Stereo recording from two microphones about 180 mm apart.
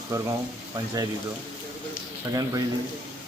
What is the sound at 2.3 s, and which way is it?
Speech, 20° right (ahead or behind).